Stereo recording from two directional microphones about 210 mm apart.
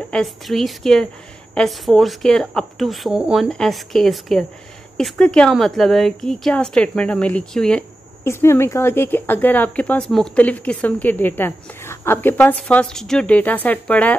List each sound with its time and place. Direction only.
0.1 s a woman's voice: centre (ahead or behind)